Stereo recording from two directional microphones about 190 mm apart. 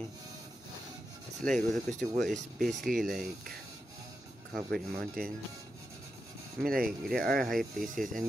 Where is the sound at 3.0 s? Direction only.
Centre (ahead or behind).